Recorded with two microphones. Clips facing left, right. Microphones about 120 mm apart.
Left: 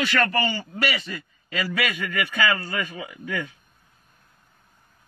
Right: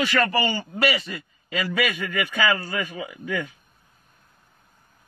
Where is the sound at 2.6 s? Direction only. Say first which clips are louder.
Right 1 dB; 25° right (ahead or behind).